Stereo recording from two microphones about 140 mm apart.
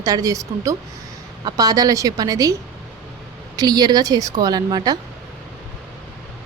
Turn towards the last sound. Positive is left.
turn(degrees=-30)  # may be behind; listen again after turning